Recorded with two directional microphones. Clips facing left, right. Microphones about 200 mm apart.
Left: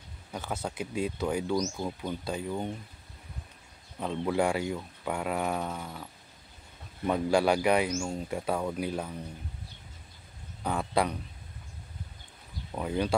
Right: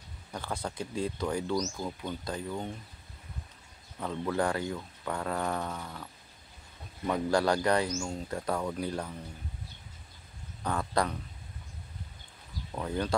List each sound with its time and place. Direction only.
0.3 s speech: 5° left (ahead or behind)
4.0 s speech: 20° left (ahead or behind)
7.1 s speech: 10° left (ahead or behind)
10.6 s speech: 10° left (ahead or behind)
12.7 s speech: 10° left (ahead or behind)